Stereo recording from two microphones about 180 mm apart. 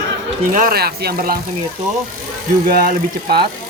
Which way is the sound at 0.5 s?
55° right (ahead or behind).